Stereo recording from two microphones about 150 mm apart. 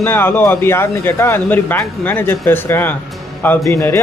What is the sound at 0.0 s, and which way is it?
A man's voice, 15° left (ahead or behind).